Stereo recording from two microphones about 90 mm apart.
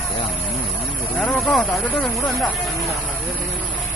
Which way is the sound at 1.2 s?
15° left (ahead or behind).